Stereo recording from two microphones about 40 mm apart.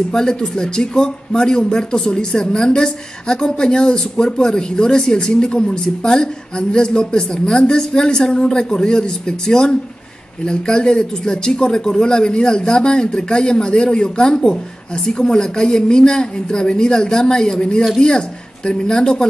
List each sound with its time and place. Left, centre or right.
0.1 s a woman's voice: centre